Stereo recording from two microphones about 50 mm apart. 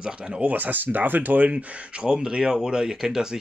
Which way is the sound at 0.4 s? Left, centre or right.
Right.